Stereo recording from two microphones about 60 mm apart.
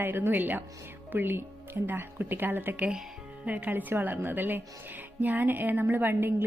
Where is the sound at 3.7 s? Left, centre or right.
Right.